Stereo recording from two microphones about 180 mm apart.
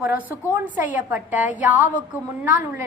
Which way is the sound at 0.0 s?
10° right (ahead or behind).